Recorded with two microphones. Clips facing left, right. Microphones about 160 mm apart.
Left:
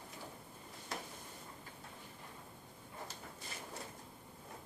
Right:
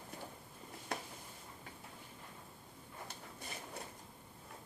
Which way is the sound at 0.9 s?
60° right (ahead or behind).